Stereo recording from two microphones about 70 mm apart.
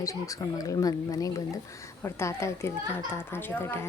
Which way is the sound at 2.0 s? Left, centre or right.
Left.